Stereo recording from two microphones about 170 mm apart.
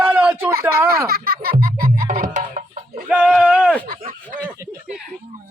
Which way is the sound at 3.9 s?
60° right (ahead or behind).